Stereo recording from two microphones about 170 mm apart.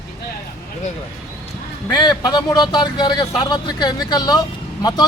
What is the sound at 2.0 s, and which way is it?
Speech, 25° left (ahead or behind).